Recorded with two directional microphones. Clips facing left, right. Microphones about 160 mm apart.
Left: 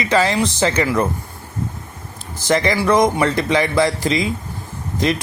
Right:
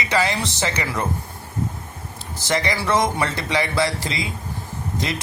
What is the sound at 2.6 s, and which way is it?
Speech, 20° left (ahead or behind).